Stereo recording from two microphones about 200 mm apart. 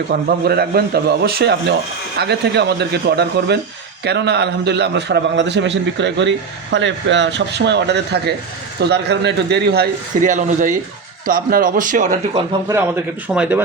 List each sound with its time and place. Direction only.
0.1 s a man's voice: 55° right (ahead or behind)
12.6 s a man's voice: 10° right (ahead or behind)